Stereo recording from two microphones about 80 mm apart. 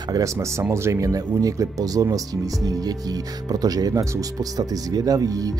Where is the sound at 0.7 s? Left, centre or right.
Right.